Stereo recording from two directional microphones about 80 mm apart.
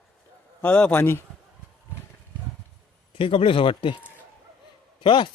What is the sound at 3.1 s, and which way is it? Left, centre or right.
Speech, left.